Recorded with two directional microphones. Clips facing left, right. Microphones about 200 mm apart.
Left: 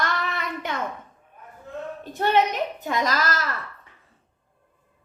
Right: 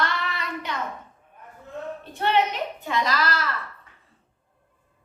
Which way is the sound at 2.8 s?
45° left (ahead or behind).